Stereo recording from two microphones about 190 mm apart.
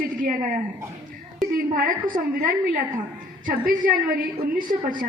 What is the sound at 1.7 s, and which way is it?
A woman's voice, 45° right (ahead or behind).